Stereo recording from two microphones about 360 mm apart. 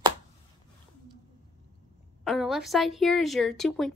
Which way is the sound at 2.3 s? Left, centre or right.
Centre.